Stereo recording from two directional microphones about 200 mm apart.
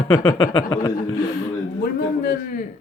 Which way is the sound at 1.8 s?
50° left (ahead or behind).